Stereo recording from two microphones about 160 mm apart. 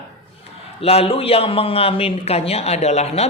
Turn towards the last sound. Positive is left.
turn(degrees=40)  # may be behind; listen again after turning